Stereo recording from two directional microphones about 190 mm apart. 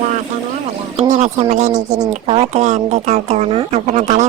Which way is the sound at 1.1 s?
35° right (ahead or behind).